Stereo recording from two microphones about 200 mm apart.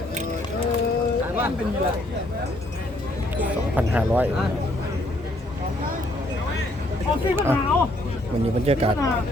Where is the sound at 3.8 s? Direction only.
10° right (ahead or behind).